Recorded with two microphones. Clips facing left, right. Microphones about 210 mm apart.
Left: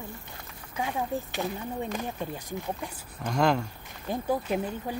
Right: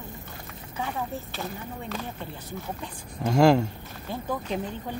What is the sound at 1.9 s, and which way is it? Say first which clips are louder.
Speech: left 2 dB; 15° left (ahead or behind).